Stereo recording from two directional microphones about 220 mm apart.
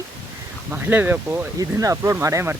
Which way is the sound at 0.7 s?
10° right (ahead or behind).